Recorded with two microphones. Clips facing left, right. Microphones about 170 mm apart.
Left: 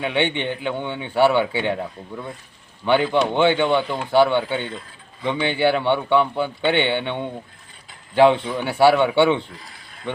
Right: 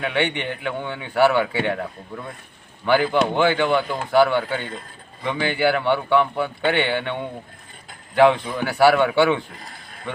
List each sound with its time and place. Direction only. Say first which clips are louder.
0.0 s a man's voice: left 1 dB; 25° left (ahead or behind)
2.8 s a man's voice: even; 25° left (ahead or behind)
9.5 s a sound: right 2 dB; 50° right (ahead or behind)